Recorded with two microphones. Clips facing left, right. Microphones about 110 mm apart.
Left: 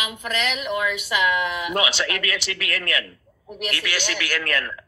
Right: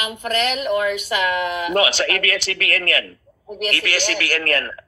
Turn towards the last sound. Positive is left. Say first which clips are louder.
# right 4 dB
turn(degrees=-45)  # may be behind; listen again after turning